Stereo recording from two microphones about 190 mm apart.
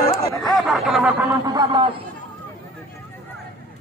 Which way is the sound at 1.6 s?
25° right (ahead or behind).